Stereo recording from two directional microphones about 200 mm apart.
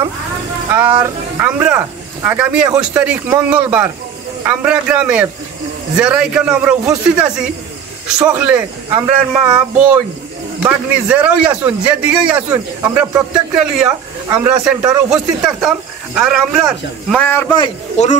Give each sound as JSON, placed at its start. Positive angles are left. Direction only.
{"t": 0.7, "sound": "a man's voice", "side_deg": -10}
{"t": 17.6, "sound": "a man's voice", "side_deg": 30}